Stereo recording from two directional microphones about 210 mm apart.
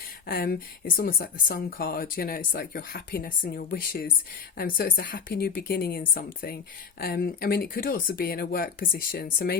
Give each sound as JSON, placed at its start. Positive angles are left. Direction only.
{"t": 0.3, "sound": "speech", "side_deg": 45}